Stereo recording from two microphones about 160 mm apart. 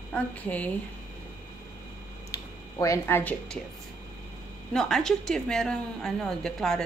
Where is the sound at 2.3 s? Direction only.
20° left (ahead or behind).